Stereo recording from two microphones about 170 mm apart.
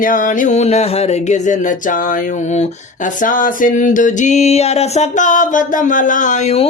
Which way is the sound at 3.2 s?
50° left (ahead or behind).